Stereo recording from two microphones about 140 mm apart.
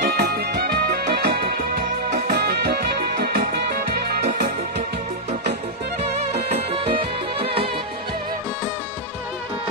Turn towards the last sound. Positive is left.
turn(degrees=-40)  # may be behind; listen again after turning